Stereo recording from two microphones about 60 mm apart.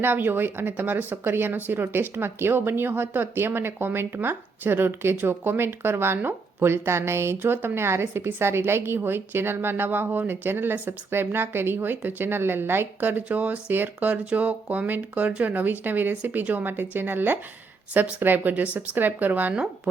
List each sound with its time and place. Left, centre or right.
0.0 s speech: right